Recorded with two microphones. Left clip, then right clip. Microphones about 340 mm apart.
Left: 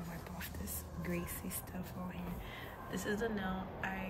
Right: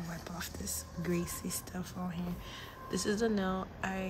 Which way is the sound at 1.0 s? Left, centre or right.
Centre.